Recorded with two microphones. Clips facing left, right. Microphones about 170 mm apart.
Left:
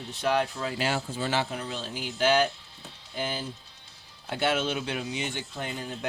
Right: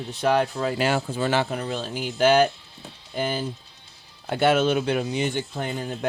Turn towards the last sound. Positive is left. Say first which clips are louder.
# right 6 dB
turn(degrees=-50)  # may be behind; listen again after turning